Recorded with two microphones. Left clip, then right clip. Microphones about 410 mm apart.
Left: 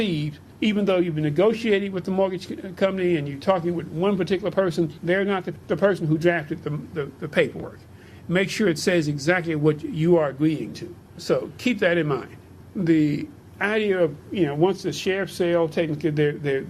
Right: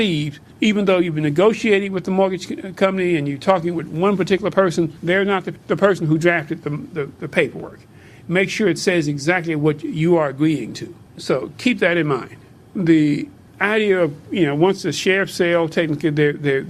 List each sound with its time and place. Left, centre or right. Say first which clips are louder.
0.0 s a man's voice: right 6 dB; right